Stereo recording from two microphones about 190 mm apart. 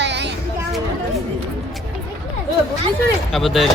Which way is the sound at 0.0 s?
65° right (ahead or behind).